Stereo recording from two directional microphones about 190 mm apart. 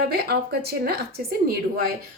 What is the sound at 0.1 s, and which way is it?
Speech, 55° right (ahead or behind).